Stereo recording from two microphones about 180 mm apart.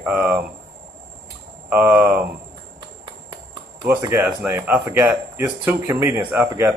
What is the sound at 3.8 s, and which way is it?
Speech, 15° right (ahead or behind).